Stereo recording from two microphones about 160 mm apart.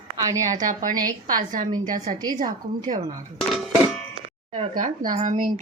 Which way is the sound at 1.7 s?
25° right (ahead or behind).